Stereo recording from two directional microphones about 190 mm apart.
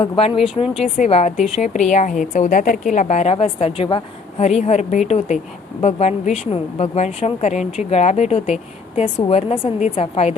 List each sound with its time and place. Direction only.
0.0 s a woman's voice: 30° left (ahead or behind)